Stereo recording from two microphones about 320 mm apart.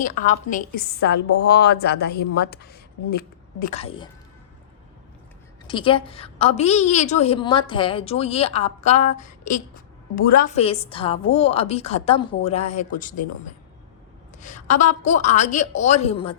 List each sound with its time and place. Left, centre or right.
0.0 s a woman's voice: left
5.6 s a woman's voice: centre